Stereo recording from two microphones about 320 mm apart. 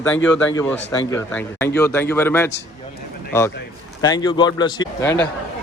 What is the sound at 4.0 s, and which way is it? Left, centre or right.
A man's voice, centre.